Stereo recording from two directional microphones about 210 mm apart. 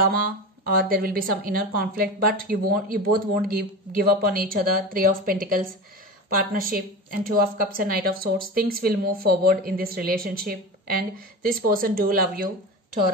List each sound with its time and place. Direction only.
0.0 s a woman's voice: 45° right (ahead or behind)